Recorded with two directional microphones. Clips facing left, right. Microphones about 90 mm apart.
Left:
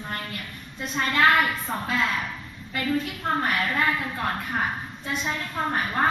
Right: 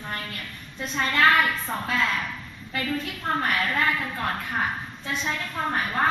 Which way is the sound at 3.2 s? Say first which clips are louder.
Right 2 dB; 10° left (ahead or behind).